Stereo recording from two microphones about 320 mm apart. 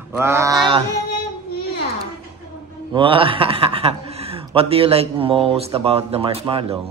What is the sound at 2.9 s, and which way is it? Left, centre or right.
A man's voice, centre.